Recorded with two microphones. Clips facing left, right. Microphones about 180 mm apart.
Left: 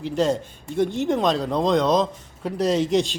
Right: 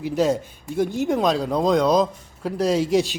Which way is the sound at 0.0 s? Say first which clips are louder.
Right 1 dB; 5° right (ahead or behind).